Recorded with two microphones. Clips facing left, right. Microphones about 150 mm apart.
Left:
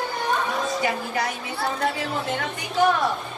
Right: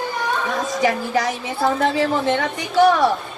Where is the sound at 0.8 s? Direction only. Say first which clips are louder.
Right 6 dB; 90° right.